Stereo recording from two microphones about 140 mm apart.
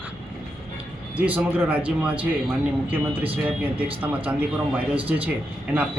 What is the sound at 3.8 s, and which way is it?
Speech, 10° right (ahead or behind).